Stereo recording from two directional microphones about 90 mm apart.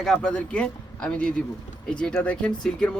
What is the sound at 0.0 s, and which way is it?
Speech, 5° left (ahead or behind).